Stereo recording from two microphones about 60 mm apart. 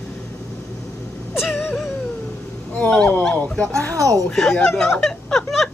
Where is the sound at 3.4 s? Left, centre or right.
Centre.